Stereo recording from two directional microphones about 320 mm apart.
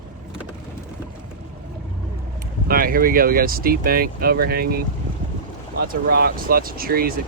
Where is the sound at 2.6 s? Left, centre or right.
Right.